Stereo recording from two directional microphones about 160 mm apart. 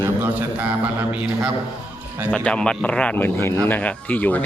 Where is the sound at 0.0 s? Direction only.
10° right (ahead or behind).